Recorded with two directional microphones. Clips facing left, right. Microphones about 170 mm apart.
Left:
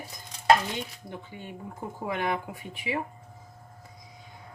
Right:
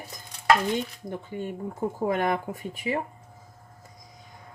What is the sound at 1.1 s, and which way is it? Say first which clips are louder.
Speech: right 10 dB; 45° right (ahead or behind).